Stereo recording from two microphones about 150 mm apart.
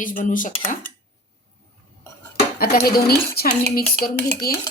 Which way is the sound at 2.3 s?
85° left.